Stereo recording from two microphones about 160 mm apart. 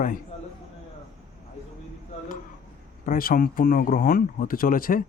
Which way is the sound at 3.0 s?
60° left (ahead or behind).